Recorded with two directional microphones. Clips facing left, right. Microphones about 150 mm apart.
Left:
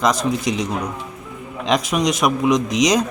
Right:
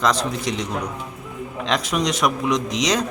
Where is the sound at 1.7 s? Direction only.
15° left (ahead or behind).